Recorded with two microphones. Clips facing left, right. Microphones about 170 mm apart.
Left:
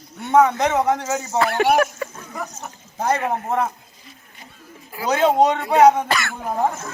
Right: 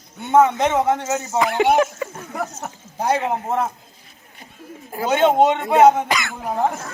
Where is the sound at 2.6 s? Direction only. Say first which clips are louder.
Right 4 dB; 70° right (ahead or behind).